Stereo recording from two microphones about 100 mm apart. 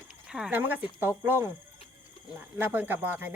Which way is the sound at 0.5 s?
20° right (ahead or behind).